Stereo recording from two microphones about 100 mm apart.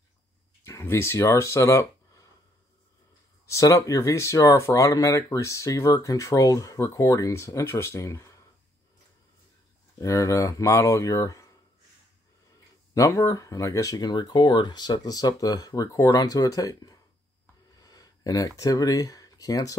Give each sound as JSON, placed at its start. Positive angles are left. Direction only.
{"t": 0.7, "sound": "speech", "side_deg": 30}
{"t": 3.4, "sound": "speech", "side_deg": 30}
{"t": 9.9, "sound": "speech", "side_deg": 30}
{"t": 12.9, "sound": "speech", "side_deg": 35}
{"t": 17.7, "sound": "a sound", "side_deg": 40}